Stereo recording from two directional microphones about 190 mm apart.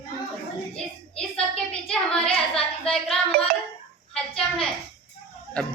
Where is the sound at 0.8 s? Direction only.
5° left (ahead or behind).